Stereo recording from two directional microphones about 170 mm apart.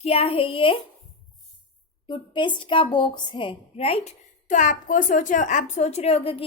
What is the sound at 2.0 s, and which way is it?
A woman's voice, 30° left (ahead or behind).